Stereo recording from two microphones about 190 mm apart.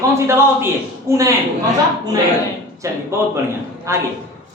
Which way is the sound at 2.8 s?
15° right (ahead or behind).